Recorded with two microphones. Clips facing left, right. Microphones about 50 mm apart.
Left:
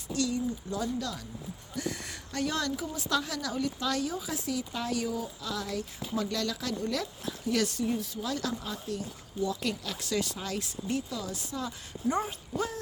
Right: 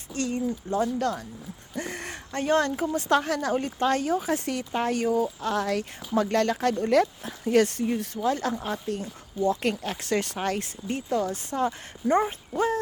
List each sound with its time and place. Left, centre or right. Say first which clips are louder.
0.1 s speech: right 2 dB; right